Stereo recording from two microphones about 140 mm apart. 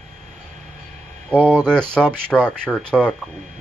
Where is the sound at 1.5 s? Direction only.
5° left (ahead or behind).